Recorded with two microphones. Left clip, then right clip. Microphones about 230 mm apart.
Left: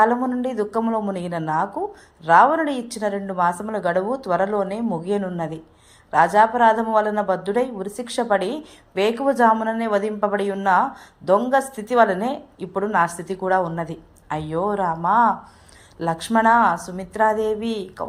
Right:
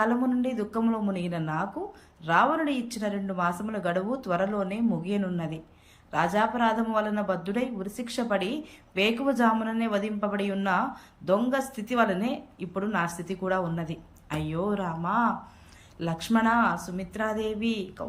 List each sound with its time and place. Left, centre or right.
0.0 s a woman's voice: centre